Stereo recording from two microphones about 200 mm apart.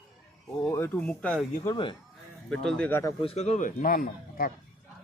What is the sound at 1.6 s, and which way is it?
Speech, 25° left (ahead or behind).